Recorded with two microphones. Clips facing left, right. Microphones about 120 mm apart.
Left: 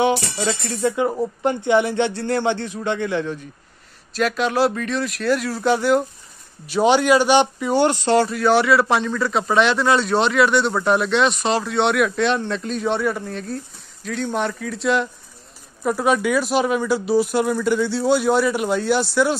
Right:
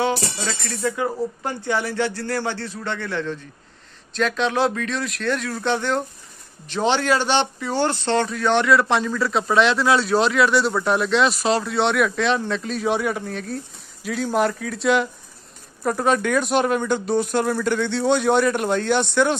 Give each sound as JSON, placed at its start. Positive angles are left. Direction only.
{"t": 0.0, "sound": "speech", "side_deg": 20}
{"t": 4.1, "sound": "speech", "side_deg": 5}